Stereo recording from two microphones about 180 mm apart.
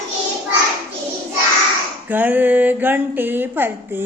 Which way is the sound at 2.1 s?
10° right (ahead or behind).